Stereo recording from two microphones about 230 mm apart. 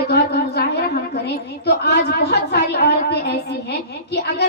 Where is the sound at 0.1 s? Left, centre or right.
Left.